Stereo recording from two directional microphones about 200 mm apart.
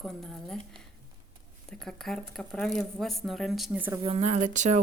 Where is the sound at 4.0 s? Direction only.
30° right (ahead or behind).